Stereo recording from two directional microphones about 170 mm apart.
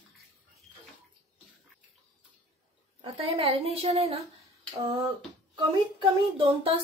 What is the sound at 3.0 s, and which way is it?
A woman's voice, 35° right (ahead or behind).